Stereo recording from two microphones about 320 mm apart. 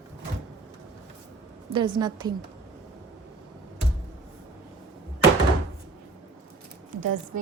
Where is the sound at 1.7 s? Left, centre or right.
Centre.